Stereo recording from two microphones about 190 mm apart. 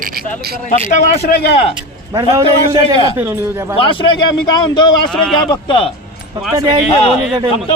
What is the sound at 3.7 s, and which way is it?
A man's voice, 25° left (ahead or behind).